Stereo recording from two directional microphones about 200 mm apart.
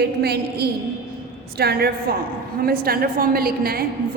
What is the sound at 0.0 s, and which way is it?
A woman's voice, 55° right (ahead or behind).